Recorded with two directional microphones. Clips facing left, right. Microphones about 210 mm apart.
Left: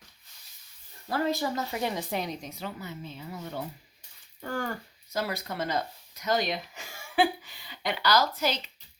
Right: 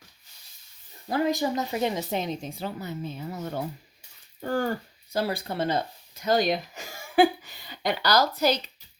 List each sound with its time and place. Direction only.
1.0 s speech: 15° right (ahead or behind); by 3.6 s 45° right (ahead or behind)
4.4 s speech: 35° right (ahead or behind)